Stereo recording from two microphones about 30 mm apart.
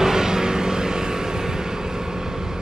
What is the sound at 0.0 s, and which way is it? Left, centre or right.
Vehicle, centre.